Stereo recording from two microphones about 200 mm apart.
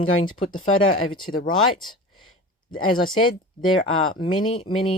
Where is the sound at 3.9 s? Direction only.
90° left.